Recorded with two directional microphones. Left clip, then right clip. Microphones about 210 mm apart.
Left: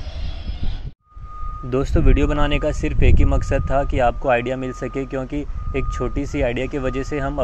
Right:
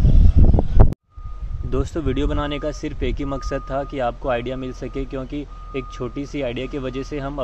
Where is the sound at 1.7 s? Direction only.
15° left (ahead or behind).